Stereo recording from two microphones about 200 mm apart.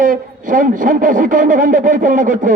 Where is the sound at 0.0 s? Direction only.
40° right (ahead or behind).